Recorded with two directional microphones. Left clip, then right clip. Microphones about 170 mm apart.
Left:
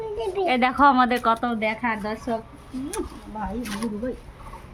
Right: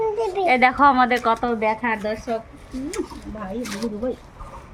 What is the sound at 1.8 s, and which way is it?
Speech, 10° left (ahead or behind).